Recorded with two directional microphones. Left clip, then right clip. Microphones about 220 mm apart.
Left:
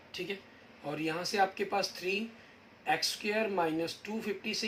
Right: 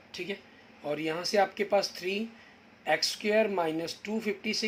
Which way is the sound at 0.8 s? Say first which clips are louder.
Right 3 dB; 45° right (ahead or behind).